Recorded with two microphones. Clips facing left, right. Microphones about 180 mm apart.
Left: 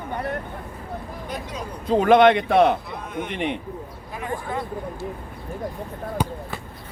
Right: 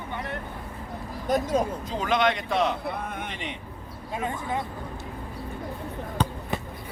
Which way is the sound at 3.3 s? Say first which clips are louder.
Left 9 dB; 60° left (ahead or behind).